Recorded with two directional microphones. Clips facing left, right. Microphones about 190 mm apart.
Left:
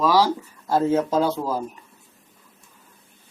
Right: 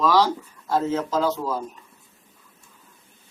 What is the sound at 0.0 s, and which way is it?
Speech, 10° left (ahead or behind).